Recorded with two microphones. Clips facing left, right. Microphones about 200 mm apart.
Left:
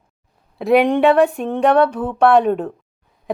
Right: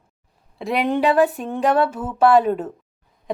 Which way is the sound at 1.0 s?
Centre (ahead or behind).